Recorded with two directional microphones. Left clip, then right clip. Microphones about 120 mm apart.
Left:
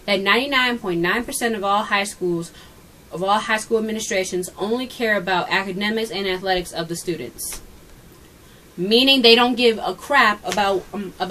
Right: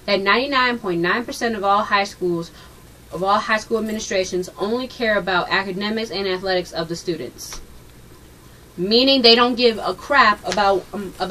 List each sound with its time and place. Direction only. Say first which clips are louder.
0.0 s a woman's voice: right 1 dB; 15° left (ahead or behind)
8.8 s a woman's voice: even; 15° left (ahead or behind)